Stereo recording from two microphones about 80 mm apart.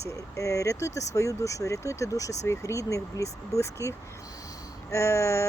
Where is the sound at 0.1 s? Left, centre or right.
Left.